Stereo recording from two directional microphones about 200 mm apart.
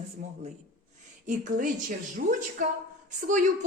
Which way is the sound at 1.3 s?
40° right (ahead or behind).